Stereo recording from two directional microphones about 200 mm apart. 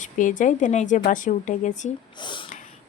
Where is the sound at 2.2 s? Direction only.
25° left (ahead or behind).